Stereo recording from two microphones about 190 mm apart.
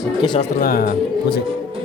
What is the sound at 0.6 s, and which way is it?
Speech, 50° left (ahead or behind).